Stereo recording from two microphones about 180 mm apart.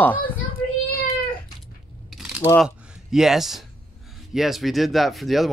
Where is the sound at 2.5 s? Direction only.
Centre (ahead or behind).